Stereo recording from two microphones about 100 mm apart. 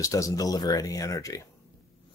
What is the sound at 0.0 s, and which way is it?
Speech, 35° left (ahead or behind).